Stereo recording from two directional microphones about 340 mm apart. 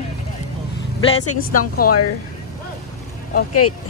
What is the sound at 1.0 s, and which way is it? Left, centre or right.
Speech, left.